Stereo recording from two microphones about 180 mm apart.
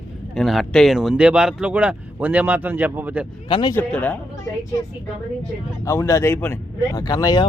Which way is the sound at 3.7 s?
5° left (ahead or behind).